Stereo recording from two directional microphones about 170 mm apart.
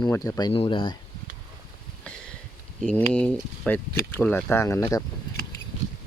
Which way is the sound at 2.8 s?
5° left (ahead or behind).